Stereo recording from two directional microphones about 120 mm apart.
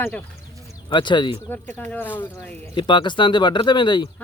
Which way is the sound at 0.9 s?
40° left (ahead or behind).